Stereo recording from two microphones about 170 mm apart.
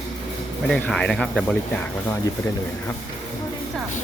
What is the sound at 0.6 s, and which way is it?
Speech, 5° left (ahead or behind).